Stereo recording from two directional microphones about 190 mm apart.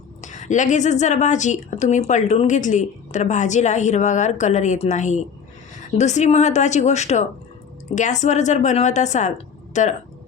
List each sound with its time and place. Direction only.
0.2 s a woman's voice: 40° left (ahead or behind)